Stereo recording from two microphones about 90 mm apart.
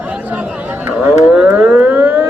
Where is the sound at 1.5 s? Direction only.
20° right (ahead or behind).